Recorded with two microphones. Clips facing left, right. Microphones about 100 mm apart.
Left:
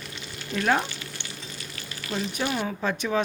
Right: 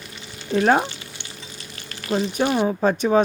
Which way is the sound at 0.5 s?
35° right (ahead or behind).